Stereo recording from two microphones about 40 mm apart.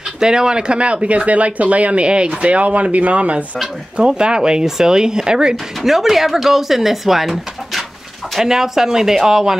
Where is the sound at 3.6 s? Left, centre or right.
Right.